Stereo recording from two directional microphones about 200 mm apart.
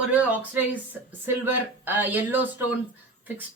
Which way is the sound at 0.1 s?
10° right (ahead or behind).